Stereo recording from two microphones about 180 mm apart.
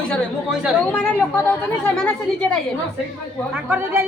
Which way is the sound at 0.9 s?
10° left (ahead or behind).